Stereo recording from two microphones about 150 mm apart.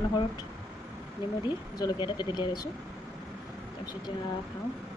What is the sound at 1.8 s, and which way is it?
Speech, 30° left (ahead or behind).